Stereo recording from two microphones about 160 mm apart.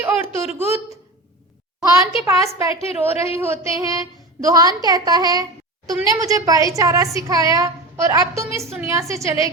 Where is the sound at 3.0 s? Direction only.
40° left (ahead or behind).